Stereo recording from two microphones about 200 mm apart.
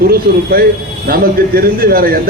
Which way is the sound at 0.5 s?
50° right (ahead or behind).